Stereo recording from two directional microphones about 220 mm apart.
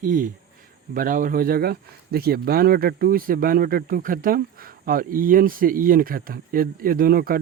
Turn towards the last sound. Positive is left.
turn(degrees=-40)  # may be behind; listen again after turning